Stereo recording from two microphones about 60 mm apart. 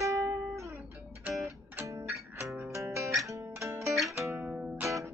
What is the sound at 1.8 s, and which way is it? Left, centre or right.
Music, right.